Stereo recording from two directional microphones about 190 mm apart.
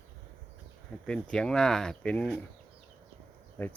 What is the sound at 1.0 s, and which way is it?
Speech, 5° left (ahead or behind).